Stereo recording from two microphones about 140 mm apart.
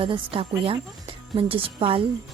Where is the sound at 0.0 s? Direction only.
40° right (ahead or behind).